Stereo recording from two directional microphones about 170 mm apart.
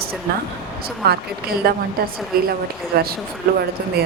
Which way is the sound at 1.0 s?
70° right (ahead or behind).